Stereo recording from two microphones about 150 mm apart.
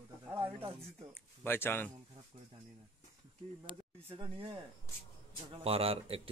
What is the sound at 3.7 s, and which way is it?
Speech, 35° right (ahead or behind).